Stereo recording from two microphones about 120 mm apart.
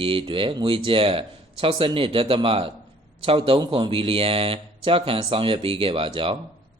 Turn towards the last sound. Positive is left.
turn(degrees=-50)  # may be behind; listen again after turning